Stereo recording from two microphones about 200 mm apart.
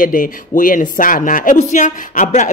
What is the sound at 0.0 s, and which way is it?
Speech, 40° left (ahead or behind).